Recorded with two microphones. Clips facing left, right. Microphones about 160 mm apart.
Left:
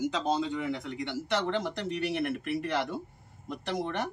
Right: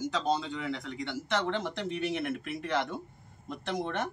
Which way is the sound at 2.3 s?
5° left (ahead or behind).